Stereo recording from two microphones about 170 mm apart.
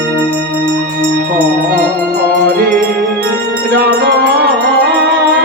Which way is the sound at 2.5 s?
65° right (ahead or behind).